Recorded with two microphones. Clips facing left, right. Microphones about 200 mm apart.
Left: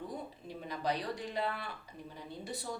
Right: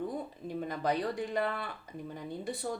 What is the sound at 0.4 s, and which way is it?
A woman's voice, 50° right (ahead or behind).